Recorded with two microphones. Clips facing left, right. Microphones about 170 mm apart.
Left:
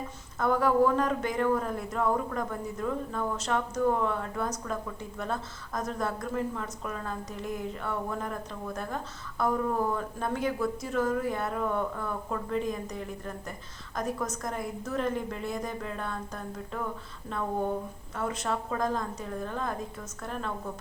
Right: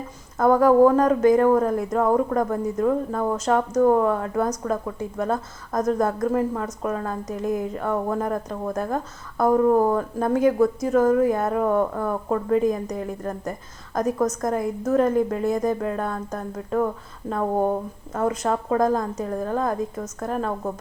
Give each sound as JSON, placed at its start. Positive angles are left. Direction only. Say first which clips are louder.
{"t": 0.3, "sound": "a woman's voice", "louder": "right 9 dB", "side_deg": -45}